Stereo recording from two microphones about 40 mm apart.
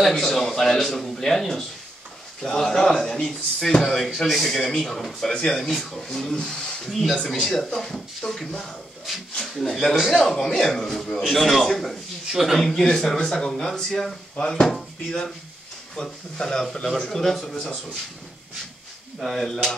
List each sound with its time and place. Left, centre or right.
0.0 s a man's voice: centre
6.3 s a man's voice: centre
6.9 s a man's voice: centre
12.3 s speech: centre
12.6 s a man's voice: centre
19.1 s a man's voice: centre